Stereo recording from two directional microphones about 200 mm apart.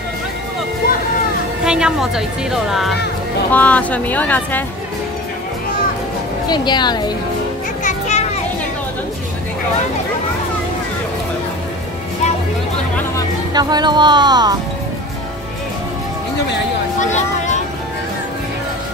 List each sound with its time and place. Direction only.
1.6 s a woman's voice: 5° right (ahead or behind)
6.5 s speech: 20° left (ahead or behind)
7.8 s children playing: 35° left (ahead or behind)
13.5 s speech: 20° right (ahead or behind)
17.0 s speech: 35° left (ahead or behind)